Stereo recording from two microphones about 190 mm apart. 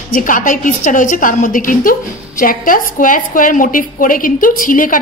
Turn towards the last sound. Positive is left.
turn(degrees=45)  # may be behind; listen again after turning